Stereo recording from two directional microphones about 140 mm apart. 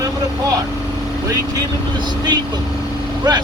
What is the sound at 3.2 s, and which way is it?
Speech, 30° right (ahead or behind).